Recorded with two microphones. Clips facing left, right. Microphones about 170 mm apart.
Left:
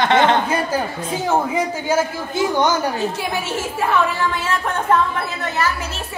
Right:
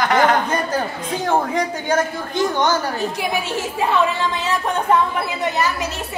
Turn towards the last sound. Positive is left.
turn(degrees=-15)  # may be behind; listen again after turning